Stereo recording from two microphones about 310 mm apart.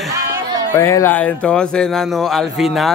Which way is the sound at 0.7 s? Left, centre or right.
Centre.